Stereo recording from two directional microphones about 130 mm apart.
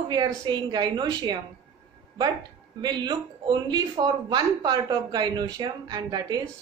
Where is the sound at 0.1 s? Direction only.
35° right (ahead or behind).